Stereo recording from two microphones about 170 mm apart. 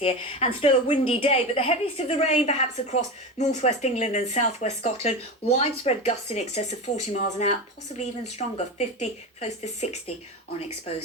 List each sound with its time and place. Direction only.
0.0 s a woman's voice: 35° left (ahead or behind)